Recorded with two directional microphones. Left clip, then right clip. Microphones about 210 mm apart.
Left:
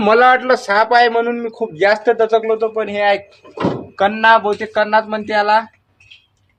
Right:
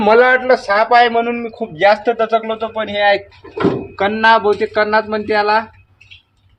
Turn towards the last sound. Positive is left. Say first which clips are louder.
# even
turn(degrees=-5)  # may be behind; listen again after turning